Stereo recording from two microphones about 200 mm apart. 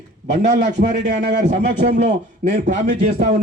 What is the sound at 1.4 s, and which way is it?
A man's voice, 40° right (ahead or behind).